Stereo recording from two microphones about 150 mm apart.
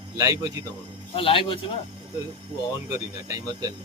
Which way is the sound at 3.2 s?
25° right (ahead or behind).